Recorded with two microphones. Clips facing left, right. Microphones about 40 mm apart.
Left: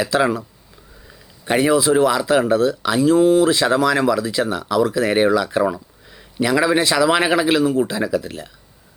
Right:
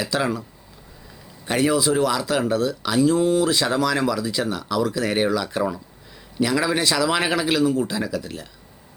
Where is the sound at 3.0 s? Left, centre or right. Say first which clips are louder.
Left 6 dB; left.